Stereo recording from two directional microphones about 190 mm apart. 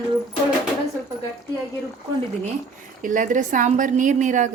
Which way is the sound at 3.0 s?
45° right (ahead or behind).